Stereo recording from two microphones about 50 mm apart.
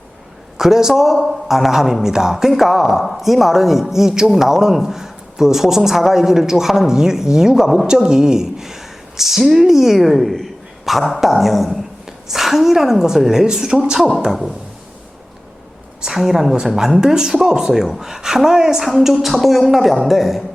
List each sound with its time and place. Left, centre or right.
0.5 s a man's voice: centre
16.0 s speech: centre